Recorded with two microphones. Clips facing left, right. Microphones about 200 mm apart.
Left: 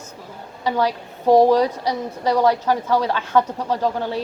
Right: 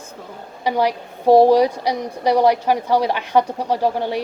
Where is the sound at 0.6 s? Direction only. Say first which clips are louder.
Right 2 dB; 15° right (ahead or behind).